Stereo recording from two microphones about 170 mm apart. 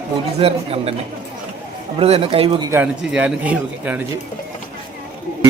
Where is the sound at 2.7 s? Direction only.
10° right (ahead or behind).